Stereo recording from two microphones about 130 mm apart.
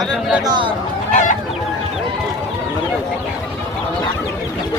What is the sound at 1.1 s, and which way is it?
Chicken, 75° left (ahead or behind).